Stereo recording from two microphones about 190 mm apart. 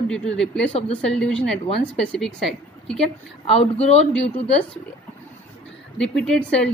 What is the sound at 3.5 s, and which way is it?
Speech, 35° left (ahead or behind).